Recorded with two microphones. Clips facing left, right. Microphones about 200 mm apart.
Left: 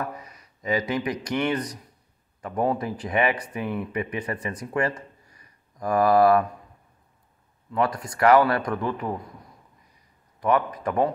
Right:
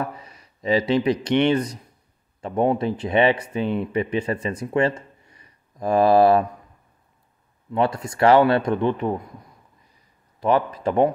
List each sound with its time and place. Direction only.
0.0 s speech: 30° right (ahead or behind)
7.7 s speech: 25° right (ahead or behind)
10.4 s speech: 30° right (ahead or behind)